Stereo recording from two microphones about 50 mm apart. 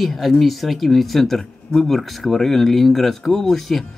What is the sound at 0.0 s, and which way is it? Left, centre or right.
Speech, centre.